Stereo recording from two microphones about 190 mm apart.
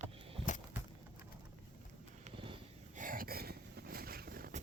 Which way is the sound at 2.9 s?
45° right (ahead or behind).